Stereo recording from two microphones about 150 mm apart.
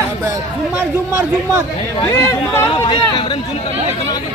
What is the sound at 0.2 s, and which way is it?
Chatter, 15° right (ahead or behind).